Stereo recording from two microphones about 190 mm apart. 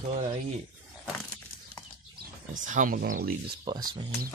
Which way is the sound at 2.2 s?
45° right (ahead or behind).